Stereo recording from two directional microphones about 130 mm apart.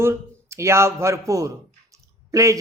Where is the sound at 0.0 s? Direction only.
20° right (ahead or behind).